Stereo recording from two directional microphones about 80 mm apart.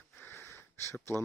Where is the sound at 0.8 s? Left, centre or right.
Left.